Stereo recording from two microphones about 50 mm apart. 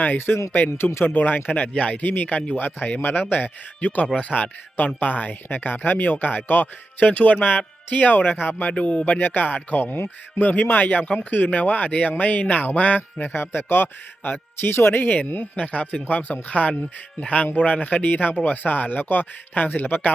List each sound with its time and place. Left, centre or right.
0.0 s a man's voice: left
7.1 s speech: left
8.5 s speech: left
9.1 s speech: left
13.2 s a man's voice: left